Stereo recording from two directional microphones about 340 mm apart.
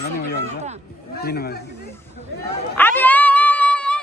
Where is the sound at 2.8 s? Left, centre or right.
Centre.